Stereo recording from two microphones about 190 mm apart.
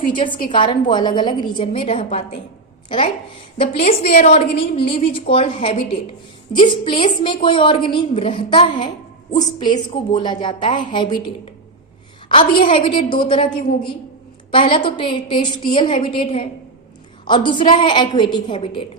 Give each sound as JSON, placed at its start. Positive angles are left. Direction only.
{"t": 0.1, "sound": "a woman's voice", "side_deg": 25}
{"t": 3.6, "sound": "a woman's voice", "side_deg": 30}